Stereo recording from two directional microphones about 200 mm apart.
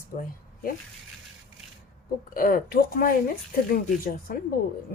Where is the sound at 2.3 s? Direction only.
45° left (ahead or behind).